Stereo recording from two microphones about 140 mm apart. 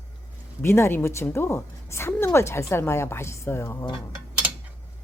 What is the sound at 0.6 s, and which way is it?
A woman's voice, 20° left (ahead or behind).